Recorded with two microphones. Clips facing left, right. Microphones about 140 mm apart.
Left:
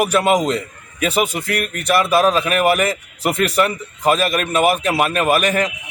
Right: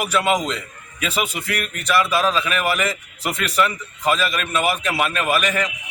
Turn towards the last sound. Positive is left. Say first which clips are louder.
# left 4 dB
turn(degrees=45)  # may be behind; listen again after turning